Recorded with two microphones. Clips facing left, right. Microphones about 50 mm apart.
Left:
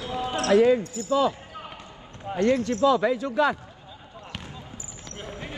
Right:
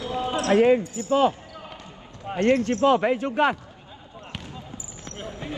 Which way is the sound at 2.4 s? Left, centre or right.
Right.